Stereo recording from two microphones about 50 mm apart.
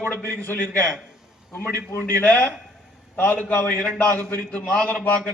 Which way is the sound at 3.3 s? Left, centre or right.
Left.